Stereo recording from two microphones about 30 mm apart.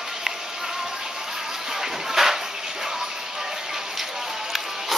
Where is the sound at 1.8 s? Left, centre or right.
Centre.